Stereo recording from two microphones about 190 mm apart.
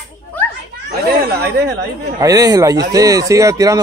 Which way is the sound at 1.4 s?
60° right (ahead or behind).